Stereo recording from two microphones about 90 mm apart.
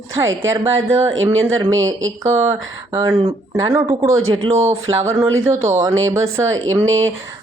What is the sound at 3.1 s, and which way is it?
Speech, 90° right.